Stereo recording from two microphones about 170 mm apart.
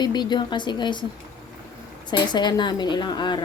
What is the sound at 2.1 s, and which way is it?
Speech, 25° left (ahead or behind).